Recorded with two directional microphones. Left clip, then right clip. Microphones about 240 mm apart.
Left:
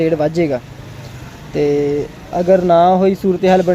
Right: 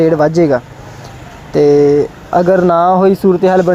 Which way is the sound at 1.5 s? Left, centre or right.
Centre.